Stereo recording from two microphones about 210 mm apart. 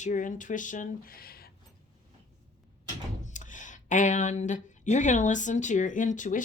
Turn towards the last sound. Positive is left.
turn(degrees=35)  # may be behind; listen again after turning